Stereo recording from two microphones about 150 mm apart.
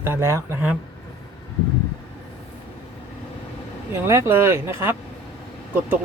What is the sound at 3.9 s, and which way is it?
Speech, 20° right (ahead or behind).